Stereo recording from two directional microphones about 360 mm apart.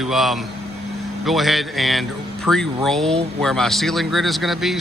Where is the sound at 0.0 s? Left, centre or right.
Centre.